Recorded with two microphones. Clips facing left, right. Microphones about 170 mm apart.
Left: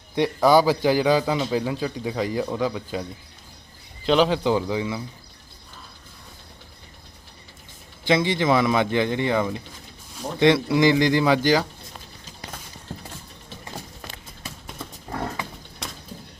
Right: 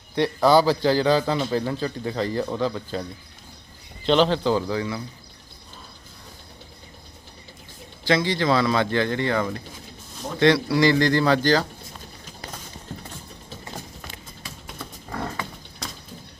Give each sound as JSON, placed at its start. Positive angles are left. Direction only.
{"t": 0.4, "sound": "a man's voice", "side_deg": 15}
{"t": 8.0, "sound": "a man's voice", "side_deg": 20}